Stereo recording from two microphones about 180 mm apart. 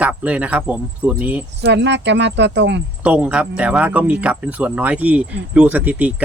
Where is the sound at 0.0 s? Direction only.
5° right (ahead or behind).